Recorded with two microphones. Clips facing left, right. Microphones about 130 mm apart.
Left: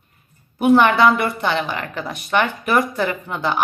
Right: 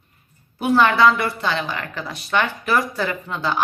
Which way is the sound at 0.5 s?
20° left (ahead or behind).